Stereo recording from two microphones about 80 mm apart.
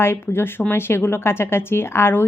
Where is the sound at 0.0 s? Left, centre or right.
Left.